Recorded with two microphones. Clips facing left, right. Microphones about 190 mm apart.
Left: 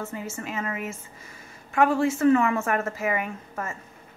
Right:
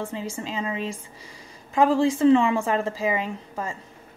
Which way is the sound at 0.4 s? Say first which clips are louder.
Right 2 dB; 25° right (ahead or behind).